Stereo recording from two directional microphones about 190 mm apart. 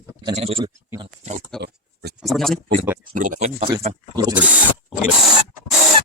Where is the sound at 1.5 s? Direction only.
60° right (ahead or behind).